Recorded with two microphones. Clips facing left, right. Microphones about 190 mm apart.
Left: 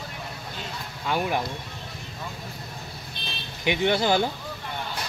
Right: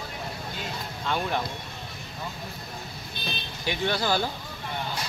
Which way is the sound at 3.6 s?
20° left (ahead or behind).